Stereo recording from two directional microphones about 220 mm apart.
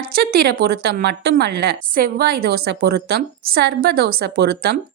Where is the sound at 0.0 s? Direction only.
45° right (ahead or behind).